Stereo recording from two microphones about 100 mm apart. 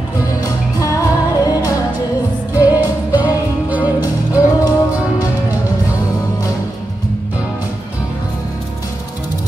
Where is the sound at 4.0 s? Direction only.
40° left (ahead or behind).